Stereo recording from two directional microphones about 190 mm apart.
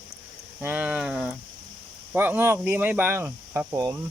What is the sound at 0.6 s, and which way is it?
Speech, 10° right (ahead or behind).